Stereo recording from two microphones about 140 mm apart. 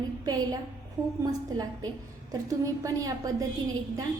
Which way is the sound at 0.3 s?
30° right (ahead or behind).